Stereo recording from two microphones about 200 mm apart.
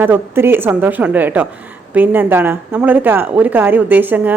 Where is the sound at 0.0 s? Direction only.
10° right (ahead or behind).